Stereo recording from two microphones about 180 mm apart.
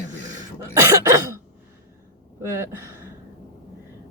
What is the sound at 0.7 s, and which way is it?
Cough, 15° right (ahead or behind).